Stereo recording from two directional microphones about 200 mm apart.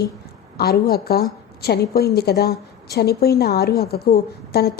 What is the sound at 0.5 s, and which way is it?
A woman's voice, 50° left (ahead or behind).